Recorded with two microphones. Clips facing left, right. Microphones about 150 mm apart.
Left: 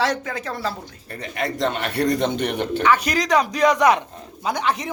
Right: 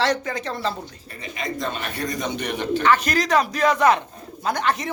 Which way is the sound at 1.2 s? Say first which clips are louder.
Left 4 dB; 65° left (ahead or behind).